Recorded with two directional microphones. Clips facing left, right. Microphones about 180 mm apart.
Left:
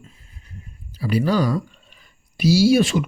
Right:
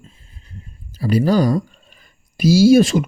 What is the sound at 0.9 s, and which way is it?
Speech, 40° right (ahead or behind).